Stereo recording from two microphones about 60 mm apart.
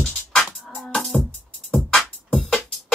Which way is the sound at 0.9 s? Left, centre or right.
Centre.